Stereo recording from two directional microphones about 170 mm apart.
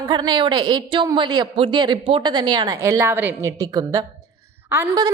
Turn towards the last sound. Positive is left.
turn(degrees=-15)  # may be behind; listen again after turning